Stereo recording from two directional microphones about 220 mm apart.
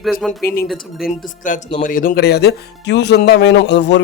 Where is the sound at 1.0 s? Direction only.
35° left (ahead or behind).